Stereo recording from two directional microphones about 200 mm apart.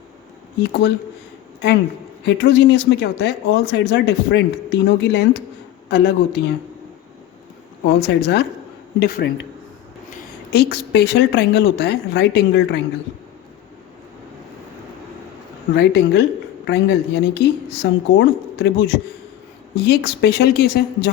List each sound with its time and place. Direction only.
0.6 s speech: 55° left (ahead or behind)
2.2 s speech: 60° left (ahead or behind)
7.9 s speech: 60° left (ahead or behind)
15.7 s speech: 55° left (ahead or behind)